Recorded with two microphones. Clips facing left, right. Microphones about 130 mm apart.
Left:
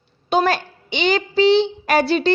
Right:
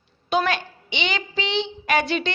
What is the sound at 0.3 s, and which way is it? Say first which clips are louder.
A woman's voice: left 4 dB; 35° left (ahead or behind).